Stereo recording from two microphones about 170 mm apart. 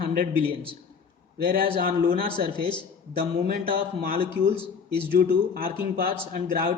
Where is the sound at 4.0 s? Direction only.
60° right (ahead or behind).